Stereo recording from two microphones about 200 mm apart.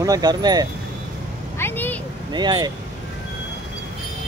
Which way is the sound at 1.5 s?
10° left (ahead or behind).